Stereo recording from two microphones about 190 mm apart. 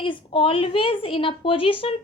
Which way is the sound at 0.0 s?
25° left (ahead or behind).